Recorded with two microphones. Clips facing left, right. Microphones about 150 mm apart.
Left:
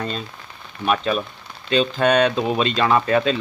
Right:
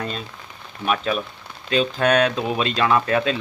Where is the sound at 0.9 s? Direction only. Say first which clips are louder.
Left 2 dB; centre (ahead or behind).